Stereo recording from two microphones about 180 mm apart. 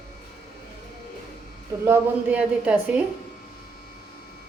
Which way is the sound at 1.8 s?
10° right (ahead or behind).